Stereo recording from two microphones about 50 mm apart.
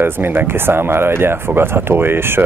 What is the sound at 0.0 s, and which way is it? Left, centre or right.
Speech, right.